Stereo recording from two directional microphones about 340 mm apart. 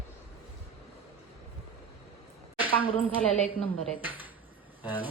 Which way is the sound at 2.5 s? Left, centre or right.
Centre.